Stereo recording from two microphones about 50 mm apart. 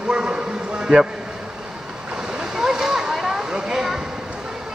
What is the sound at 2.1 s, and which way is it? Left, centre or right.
Waves, centre.